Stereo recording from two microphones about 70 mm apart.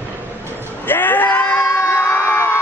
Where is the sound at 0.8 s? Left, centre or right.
Left.